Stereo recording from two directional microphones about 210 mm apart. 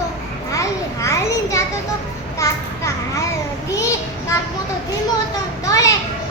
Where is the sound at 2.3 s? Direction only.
15° left (ahead or behind).